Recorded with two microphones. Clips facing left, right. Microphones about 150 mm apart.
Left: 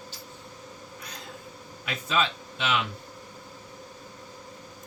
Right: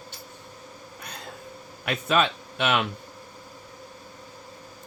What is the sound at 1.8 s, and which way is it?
Speech, 60° right (ahead or behind).